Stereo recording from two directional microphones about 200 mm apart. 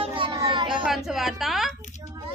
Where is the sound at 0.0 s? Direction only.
25° right (ahead or behind).